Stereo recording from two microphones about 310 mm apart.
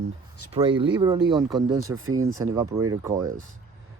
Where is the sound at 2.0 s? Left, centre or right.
Right.